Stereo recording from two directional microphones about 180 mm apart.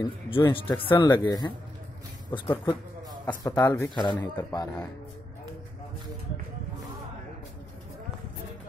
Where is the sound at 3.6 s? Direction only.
20° left (ahead or behind).